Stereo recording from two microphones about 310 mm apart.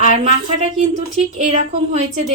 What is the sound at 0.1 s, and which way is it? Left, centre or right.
Speech, right.